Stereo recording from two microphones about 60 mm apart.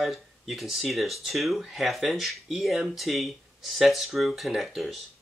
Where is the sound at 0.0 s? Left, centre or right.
Centre.